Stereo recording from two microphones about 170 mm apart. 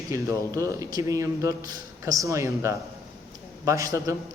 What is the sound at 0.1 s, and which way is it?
A man's voice, 20° right (ahead or behind).